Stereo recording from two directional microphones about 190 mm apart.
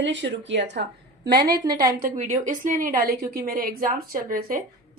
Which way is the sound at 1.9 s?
45° right (ahead or behind).